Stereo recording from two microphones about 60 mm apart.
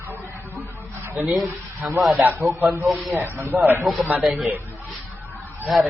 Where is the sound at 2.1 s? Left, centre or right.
Right.